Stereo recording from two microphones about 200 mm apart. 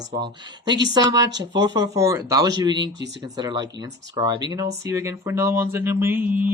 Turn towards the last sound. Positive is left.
turn(degrees=-10)  # may be behind; listen again after turning